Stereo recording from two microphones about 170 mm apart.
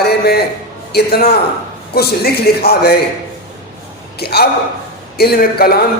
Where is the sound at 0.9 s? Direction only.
65° left (ahead or behind).